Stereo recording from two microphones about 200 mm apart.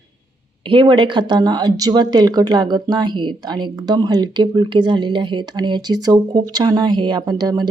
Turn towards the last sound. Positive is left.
turn(degrees=-20)  # may be behind; listen again after turning